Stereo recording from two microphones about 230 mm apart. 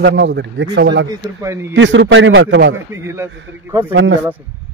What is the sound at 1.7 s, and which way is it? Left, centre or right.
A man's voice, right.